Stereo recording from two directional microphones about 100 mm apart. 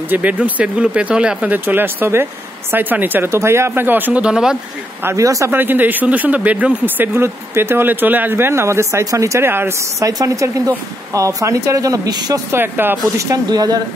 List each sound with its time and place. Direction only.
0.1 s speech: 15° right (ahead or behind)
5.0 s speech: 35° right (ahead or behind)
5.5 s speech: 20° right (ahead or behind); by 12.4 s 40° right (ahead or behind)
12.4 s speech: 20° right (ahead or behind)
13.2 s speech: 35° right (ahead or behind)